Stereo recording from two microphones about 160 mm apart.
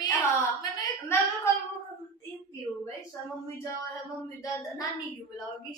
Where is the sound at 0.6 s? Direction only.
20° left (ahead or behind).